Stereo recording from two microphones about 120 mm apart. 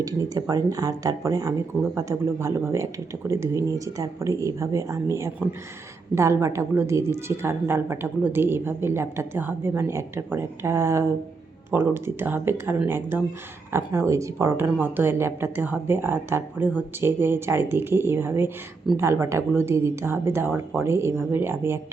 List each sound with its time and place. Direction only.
0.0 s a woman's voice: 30° right (ahead or behind)